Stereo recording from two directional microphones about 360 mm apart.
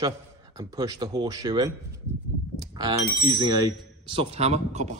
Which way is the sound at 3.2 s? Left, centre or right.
Centre.